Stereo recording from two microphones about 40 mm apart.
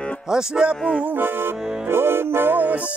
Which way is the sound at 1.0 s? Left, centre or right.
Right.